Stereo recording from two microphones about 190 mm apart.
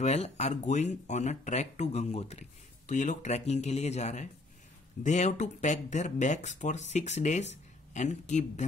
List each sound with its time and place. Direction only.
0.0 s speech: 35° left (ahead or behind)